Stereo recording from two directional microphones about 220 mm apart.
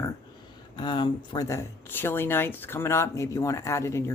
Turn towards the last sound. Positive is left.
turn(degrees=15)  # may be behind; listen again after turning